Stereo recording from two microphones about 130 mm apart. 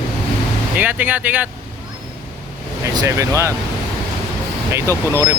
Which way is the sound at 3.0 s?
25° right (ahead or behind).